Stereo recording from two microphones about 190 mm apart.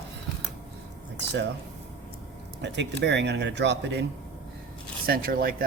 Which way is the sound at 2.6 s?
65° right (ahead or behind).